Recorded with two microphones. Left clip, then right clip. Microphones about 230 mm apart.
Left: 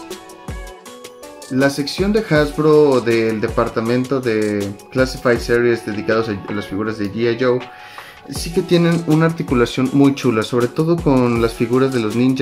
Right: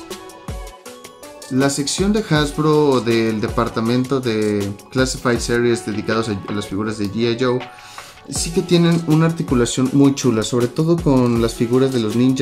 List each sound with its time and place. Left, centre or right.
1.5 s speech: centre